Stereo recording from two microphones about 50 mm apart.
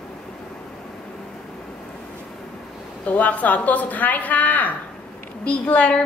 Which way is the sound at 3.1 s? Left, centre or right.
Left.